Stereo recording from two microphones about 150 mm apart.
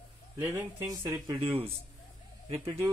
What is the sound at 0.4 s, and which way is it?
Speech, 15° right (ahead or behind).